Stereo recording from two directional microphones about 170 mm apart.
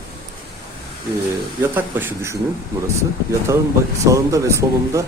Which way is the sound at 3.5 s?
15° right (ahead or behind).